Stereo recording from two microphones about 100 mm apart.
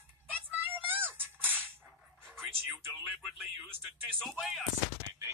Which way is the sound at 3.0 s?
5° right (ahead or behind).